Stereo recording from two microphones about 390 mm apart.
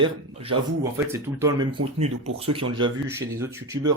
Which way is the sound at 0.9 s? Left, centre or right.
Centre.